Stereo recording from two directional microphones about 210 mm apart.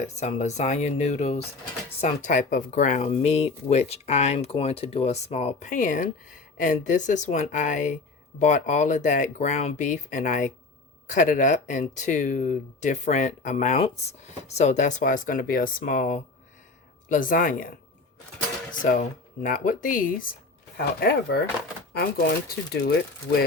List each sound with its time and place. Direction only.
0.2 s speech: 35° left (ahead or behind); by 21.4 s 50° left (ahead or behind)
22.7 s speech: 45° left (ahead or behind)